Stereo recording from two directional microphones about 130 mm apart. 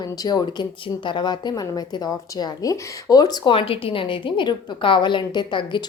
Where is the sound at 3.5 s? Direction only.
45° left (ahead or behind).